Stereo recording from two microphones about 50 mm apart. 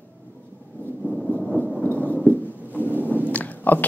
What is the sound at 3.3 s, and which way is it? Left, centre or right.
Chewing, left.